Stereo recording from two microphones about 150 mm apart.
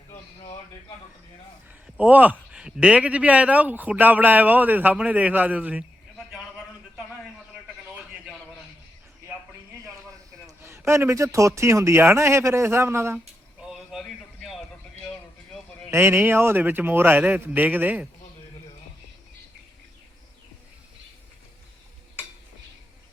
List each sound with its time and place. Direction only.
2.0 s speech: 10° right (ahead or behind)
10.6 s speech: 15° right (ahead or behind)
13.1 s a sound: centre (ahead or behind)
15.9 s speech: 15° right (ahead or behind)